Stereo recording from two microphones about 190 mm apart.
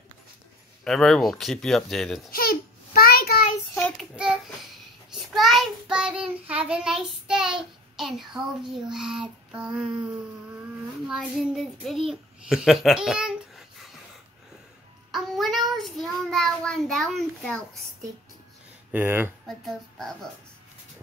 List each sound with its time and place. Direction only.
0.8 s speech: 5° left (ahead or behind)
2.3 s child singing: 50° left (ahead or behind)
3.7 s child singing: 5° left (ahead or behind)
11.1 s speech: centre (ahead or behind)
15.0 s child singing: centre (ahead or behind)
18.9 s speech: 10° right (ahead or behind)
19.4 s speech: centre (ahead or behind)